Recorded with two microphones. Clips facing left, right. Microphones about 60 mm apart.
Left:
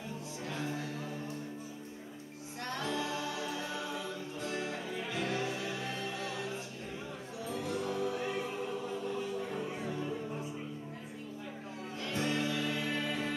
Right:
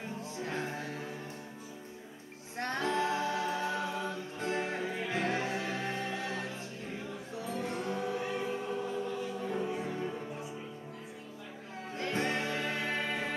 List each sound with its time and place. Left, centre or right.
0.5 s music: right
2.6 s a capella: right
7.5 s music: right
12.0 s music: right